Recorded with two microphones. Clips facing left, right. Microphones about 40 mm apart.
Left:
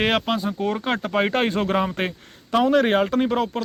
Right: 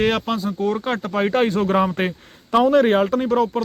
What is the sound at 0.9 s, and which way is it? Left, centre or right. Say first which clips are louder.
Speech: right 1 dB; centre.